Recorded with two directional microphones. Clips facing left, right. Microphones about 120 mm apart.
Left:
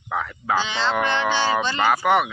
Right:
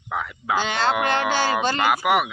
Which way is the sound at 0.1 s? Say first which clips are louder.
Left 1 dB; 5° right (ahead or behind).